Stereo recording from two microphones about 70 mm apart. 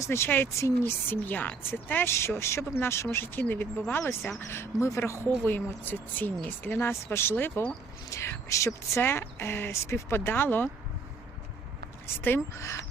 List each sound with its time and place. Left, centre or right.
0.0 s speech: left
8.1 s speech: left
12.0 s speech: left